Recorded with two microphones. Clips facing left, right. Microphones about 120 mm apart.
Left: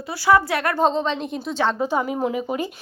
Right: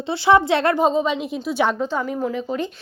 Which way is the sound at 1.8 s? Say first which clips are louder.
Left 1 dB; 10° left (ahead or behind).